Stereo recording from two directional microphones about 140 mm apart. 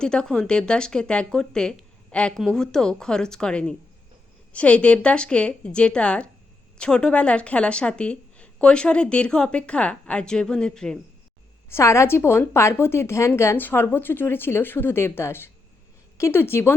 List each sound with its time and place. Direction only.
0.0 s speech: 5° left (ahead or behind)
11.7 s speech: 20° left (ahead or behind)